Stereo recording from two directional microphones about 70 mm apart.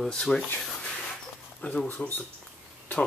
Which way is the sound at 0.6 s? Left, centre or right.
Centre.